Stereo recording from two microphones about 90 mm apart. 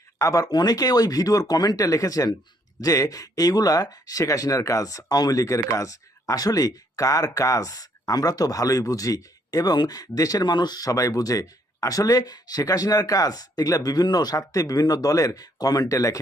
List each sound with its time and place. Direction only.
0.2 s speech: 40° left (ahead or behind)